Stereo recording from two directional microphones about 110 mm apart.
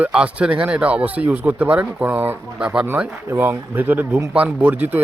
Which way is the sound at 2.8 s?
20° right (ahead or behind).